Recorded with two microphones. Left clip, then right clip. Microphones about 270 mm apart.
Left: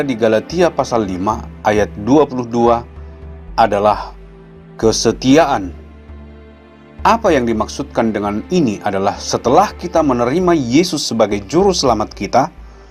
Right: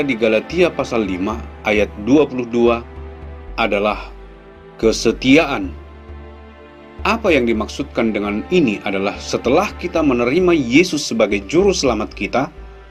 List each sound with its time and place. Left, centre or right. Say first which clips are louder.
0.0 s speech: left 2 dB; left
7.0 s speech: left 3 dB; left